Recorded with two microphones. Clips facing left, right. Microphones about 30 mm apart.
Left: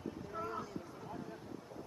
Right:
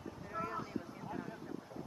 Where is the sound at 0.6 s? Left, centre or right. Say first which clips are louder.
Right 2 dB; right.